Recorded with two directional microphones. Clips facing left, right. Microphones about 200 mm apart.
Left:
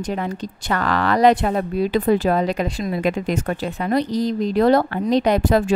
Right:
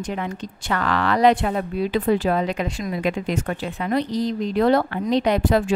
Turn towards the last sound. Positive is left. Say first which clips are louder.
# left 2 dB
turn(degrees=45)  # may be behind; listen again after turning